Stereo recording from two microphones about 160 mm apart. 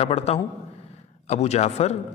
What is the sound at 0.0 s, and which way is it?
A man's voice, 40° left (ahead or behind).